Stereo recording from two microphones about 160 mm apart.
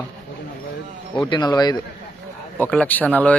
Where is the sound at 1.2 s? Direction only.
25° left (ahead or behind).